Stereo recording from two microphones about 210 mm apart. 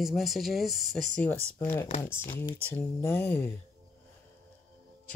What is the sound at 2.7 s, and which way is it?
Speech, 10° left (ahead or behind).